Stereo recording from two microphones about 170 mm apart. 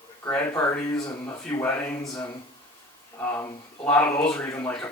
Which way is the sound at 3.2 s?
15° left (ahead or behind).